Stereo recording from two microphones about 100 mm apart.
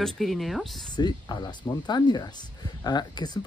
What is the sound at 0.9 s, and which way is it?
Speech, 45° left (ahead or behind).